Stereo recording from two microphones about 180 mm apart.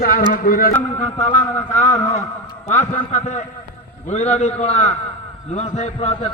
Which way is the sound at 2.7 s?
40° left (ahead or behind).